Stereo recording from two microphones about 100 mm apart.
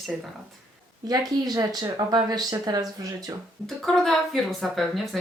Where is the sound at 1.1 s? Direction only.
40° right (ahead or behind).